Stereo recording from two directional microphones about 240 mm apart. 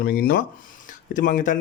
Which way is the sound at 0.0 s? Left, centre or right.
Left.